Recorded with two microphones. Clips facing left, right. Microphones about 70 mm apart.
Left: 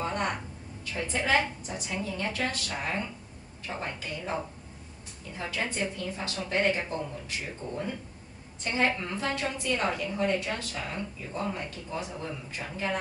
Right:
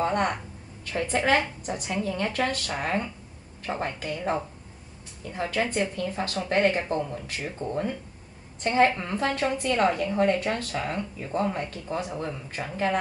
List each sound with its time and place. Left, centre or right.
0.0 s a sound: right
0.9 s a woman's voice: right
5.5 s a woman's voice: right